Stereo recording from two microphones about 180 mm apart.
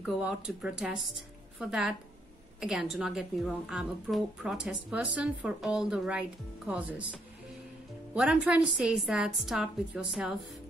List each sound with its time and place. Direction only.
0.0 s a woman's voice: 5° right (ahead or behind)